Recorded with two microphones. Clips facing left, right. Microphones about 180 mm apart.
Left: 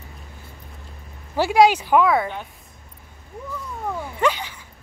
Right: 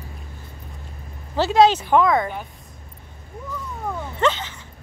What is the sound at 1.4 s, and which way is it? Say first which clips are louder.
Speech: even; 10° left (ahead or behind).